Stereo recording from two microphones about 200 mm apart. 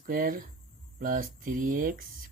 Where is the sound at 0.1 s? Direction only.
45° right (ahead or behind).